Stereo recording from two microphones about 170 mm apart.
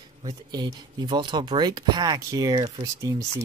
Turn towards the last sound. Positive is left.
turn(degrees=-25)  # may be behind; listen again after turning